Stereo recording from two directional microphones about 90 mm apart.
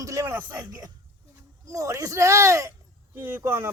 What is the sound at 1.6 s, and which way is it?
A man's voice, 35° right (ahead or behind).